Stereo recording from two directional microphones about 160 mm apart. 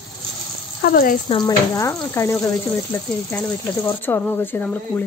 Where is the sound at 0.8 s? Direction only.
65° left (ahead or behind).